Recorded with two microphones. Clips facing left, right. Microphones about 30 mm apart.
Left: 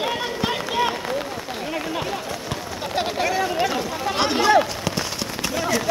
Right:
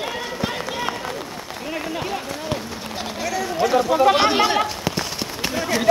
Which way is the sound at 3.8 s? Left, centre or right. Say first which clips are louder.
Right 10 dB; right.